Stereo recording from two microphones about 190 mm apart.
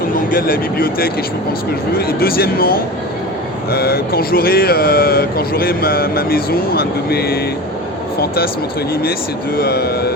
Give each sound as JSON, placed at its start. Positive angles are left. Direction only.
{"t": 0.3, "sound": "speech", "side_deg": 50}
{"t": 9.6, "sound": "speech", "side_deg": 55}